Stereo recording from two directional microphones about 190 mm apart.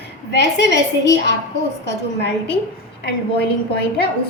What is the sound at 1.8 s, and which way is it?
Speech, 60° left (ahead or behind).